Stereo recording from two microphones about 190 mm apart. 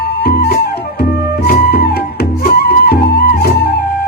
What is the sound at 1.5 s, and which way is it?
Music, 55° left (ahead or behind).